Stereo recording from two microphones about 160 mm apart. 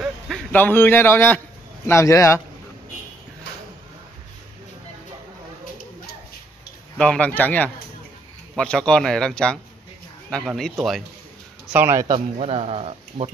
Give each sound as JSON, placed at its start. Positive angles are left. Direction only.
{"t": 0.0, "sound": "a man's voice", "side_deg": 0}
{"t": 7.0, "sound": "speech", "side_deg": 10}
{"t": 11.7, "sound": "speech", "side_deg": -15}
{"t": 12.4, "sound": "speech", "side_deg": -40}